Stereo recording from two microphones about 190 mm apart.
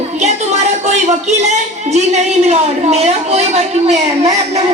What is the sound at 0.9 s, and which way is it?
A woman's voice, 35° right (ahead or behind).